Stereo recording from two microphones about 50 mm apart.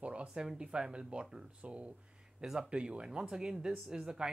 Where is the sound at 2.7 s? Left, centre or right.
Centre.